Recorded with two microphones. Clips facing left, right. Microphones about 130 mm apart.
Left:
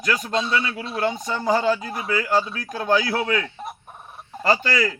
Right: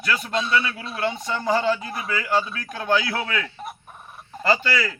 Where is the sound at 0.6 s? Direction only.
30° left (ahead or behind).